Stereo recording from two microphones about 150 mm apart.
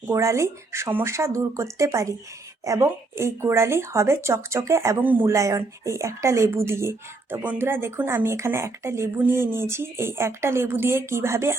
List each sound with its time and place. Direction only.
0.1 s speech: 20° right (ahead or behind)